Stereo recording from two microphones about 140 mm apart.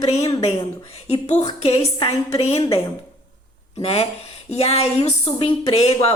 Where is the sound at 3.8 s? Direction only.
45° left (ahead or behind).